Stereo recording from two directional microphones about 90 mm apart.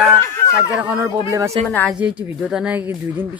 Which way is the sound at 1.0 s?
35° right (ahead or behind).